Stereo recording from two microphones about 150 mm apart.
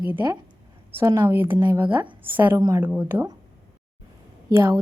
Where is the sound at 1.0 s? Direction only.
20° right (ahead or behind).